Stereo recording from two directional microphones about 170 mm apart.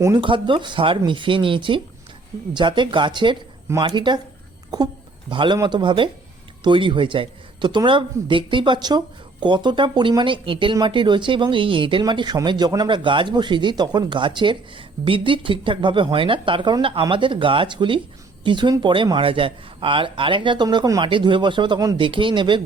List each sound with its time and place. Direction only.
0.2 s speech: 30° right (ahead or behind)